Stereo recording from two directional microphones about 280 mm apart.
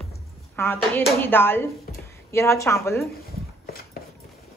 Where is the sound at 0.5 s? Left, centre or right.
Centre.